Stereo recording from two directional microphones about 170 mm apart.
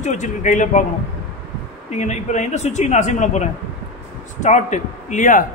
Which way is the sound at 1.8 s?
45° left (ahead or behind).